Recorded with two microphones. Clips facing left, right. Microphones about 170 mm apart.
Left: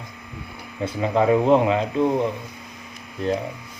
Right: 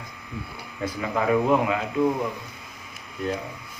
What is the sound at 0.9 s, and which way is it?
Speech, 25° left (ahead or behind).